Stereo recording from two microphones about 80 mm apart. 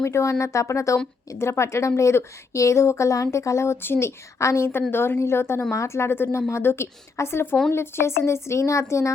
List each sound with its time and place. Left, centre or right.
0.0 s speech: left